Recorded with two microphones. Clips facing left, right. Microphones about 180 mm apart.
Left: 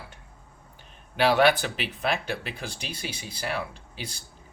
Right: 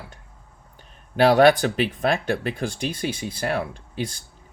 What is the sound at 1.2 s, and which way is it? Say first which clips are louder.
Speech: right 6 dB; 45° right (ahead or behind).